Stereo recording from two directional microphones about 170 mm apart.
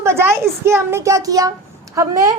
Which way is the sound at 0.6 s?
15° right (ahead or behind).